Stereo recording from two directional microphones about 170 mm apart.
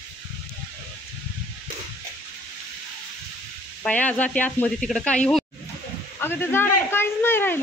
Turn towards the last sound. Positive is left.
turn(degrees=15)  # may be behind; listen again after turning